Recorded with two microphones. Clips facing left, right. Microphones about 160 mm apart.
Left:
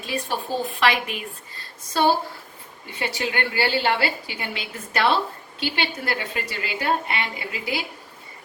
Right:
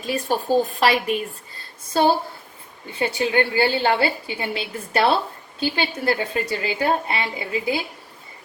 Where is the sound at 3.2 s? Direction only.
30° right (ahead or behind).